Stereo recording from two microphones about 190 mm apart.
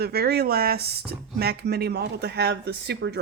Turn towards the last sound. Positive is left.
turn(degrees=-60)  # may be behind; listen again after turning